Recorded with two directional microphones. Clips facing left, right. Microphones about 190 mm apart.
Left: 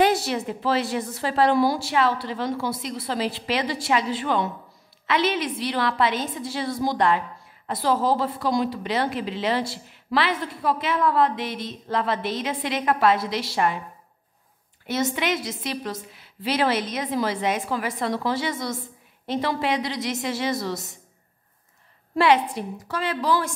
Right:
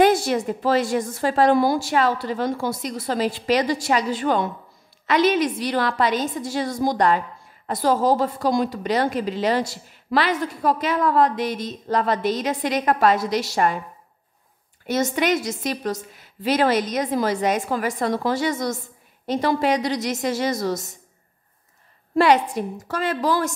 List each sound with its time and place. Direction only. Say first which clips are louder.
0.0 s a woman's voice: right 4 dB; 50° right (ahead or behind)
14.9 s a woman's voice: right 4 dB; 45° right (ahead or behind)
22.1 s a woman's voice: right 2 dB; 45° right (ahead or behind)